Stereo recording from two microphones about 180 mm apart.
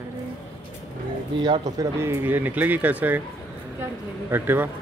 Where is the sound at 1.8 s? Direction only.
15° right (ahead or behind).